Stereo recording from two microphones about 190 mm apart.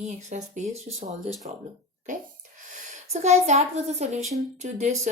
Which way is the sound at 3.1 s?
35° right (ahead or behind).